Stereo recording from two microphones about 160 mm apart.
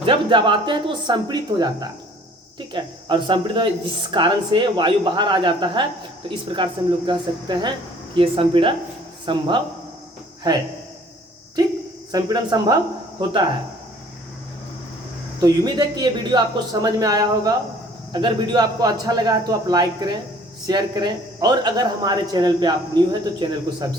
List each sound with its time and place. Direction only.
0.0 s speech: 30° right (ahead or behind)
11.6 s speech: 25° right (ahead or behind)
15.4 s speech: 25° right (ahead or behind)